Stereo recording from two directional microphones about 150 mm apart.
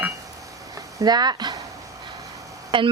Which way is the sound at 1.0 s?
25° right (ahead or behind).